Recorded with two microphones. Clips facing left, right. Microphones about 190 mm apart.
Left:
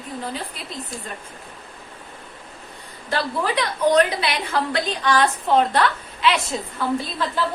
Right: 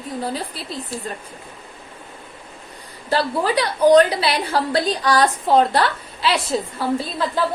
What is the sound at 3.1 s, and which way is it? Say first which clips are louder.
A woman's voice: right 4 dB; 35° right (ahead or behind).